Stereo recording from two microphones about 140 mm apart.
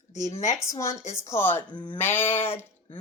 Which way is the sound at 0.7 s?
20° left (ahead or behind).